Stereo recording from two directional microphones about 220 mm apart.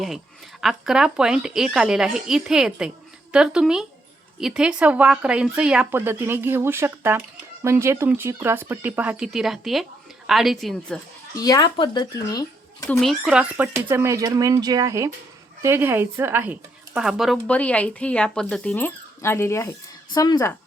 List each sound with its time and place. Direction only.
0.6 s a woman's voice: centre (ahead or behind)
11.4 s speech: 20° left (ahead or behind)
12.9 s a woman's voice: centre (ahead or behind); by 20.5 s 15° left (ahead or behind)